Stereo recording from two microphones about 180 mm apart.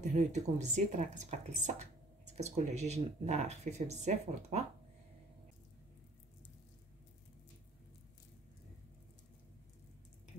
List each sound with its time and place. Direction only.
0.0 s speech: 40° right (ahead or behind)